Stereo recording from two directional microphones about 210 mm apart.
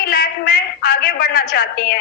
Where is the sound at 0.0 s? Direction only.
45° left (ahead or behind).